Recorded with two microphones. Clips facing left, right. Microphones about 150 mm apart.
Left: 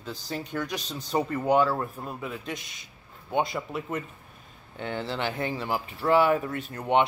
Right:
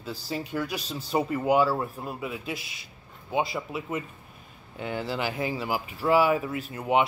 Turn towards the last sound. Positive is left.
turn(degrees=-5)  # may be behind; listen again after turning